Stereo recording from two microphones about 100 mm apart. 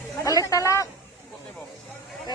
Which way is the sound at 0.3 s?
35° left (ahead or behind).